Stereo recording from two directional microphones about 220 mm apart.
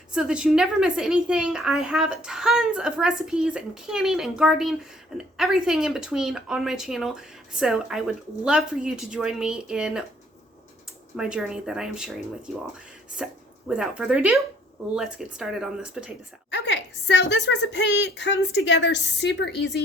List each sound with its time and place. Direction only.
0.1 s a woman's voice: 5° right (ahead or behind)
11.2 s a woman's voice: 5° right (ahead or behind)
13.2 s a woman's voice: 5° right (ahead or behind)
16.5 s a woman's voice: 50° left (ahead or behind)